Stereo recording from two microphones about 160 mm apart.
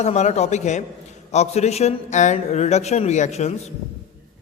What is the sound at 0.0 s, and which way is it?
A man's voice, 45° left (ahead or behind).